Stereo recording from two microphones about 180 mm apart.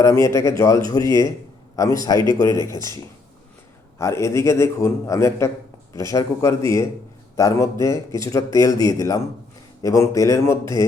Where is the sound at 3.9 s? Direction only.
15° left (ahead or behind).